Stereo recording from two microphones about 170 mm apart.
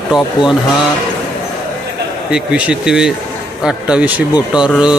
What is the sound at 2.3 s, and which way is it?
Speech, 5° right (ahead or behind).